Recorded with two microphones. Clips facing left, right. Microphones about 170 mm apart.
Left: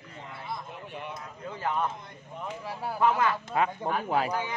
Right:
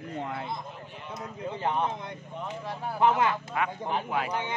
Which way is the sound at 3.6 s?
30° left (ahead or behind).